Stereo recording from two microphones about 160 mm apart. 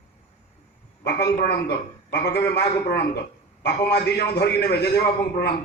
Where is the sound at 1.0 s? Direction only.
90° left.